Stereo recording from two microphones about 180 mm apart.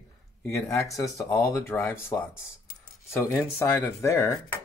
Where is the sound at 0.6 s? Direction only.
15° left (ahead or behind).